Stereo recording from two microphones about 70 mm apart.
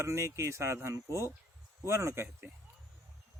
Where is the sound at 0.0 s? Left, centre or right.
Right.